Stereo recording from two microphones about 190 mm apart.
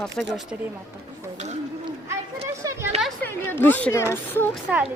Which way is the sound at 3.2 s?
10° left (ahead or behind).